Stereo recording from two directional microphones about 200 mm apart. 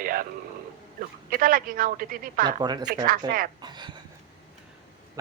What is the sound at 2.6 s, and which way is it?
A woman's voice, 20° right (ahead or behind).